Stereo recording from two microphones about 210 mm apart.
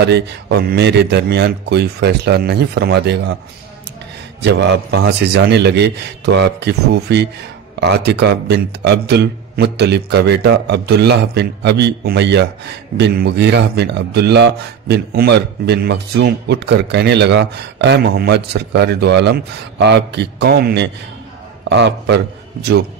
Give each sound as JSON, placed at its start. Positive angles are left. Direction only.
{"t": 0.0, "sound": "a man's voice", "side_deg": -50}
{"t": 4.4, "sound": "a man's voice", "side_deg": -55}